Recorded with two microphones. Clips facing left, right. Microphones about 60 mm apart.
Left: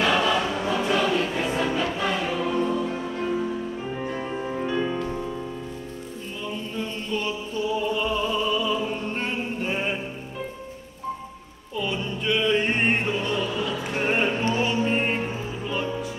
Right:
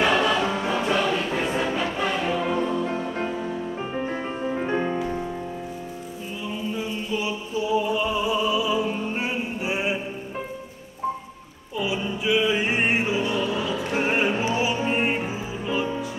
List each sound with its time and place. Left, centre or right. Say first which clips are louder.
0.0 s choir: right 1 dB; centre
1.4 s music: even; centre
3.9 s music: right 1 dB; right
6.4 s music: right 2 dB; centre
11.7 s music: right 2 dB; centre